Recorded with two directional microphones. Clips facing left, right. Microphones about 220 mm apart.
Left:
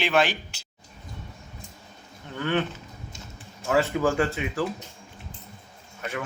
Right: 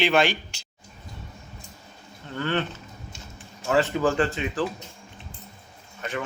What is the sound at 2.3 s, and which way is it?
Speech, 10° left (ahead or behind).